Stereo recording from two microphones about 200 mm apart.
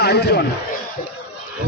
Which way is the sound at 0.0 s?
55° left (ahead or behind).